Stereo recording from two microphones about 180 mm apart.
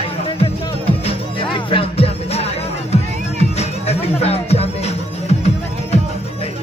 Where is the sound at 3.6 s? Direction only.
35° left (ahead or behind).